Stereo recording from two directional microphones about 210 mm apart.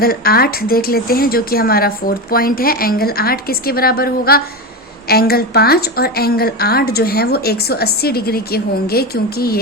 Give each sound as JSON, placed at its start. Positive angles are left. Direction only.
{"t": 0.0, "sound": "a woman's voice", "side_deg": 45}